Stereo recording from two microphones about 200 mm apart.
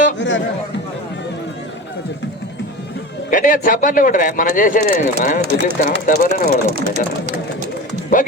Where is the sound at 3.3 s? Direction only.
40° left (ahead or behind).